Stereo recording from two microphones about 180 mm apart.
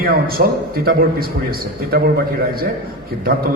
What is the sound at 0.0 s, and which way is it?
A man's voice, 55° right (ahead or behind).